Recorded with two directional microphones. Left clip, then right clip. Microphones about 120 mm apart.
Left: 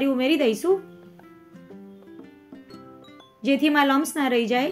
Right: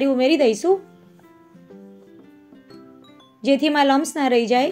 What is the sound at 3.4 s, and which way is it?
Speech, 40° right (ahead or behind).